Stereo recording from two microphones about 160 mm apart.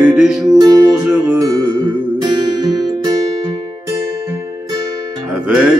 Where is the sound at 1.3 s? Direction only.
30° right (ahead or behind).